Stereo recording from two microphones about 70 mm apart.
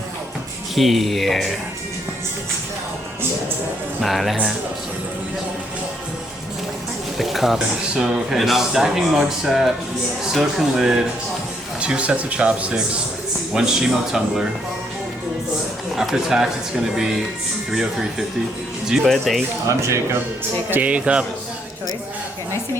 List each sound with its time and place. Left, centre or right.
0.8 s speech: centre
4.0 s speech: centre
7.2 s speech: centre
16.0 s speech: centre
20.7 s speech: right
20.9 s speech: centre